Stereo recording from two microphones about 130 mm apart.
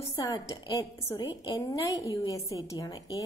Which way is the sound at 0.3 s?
25° left (ahead or behind).